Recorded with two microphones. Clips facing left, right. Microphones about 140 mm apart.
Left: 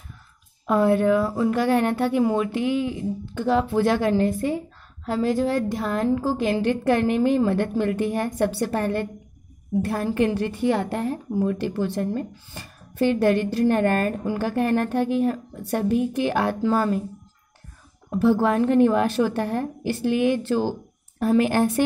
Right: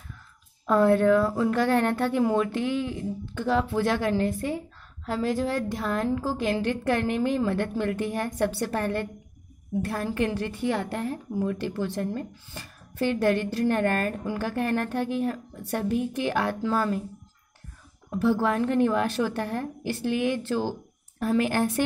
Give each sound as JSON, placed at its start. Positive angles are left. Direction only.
{"t": 0.7, "sound": "a woman's voice", "side_deg": 10}
{"t": 10.7, "sound": "a woman's voice", "side_deg": 30}
{"t": 15.3, "sound": "speech", "side_deg": 30}
{"t": 15.9, "sound": "a woman's voice", "side_deg": 15}
{"t": 18.1, "sound": "speech", "side_deg": 35}
{"t": 18.4, "sound": "a woman's voice", "side_deg": 25}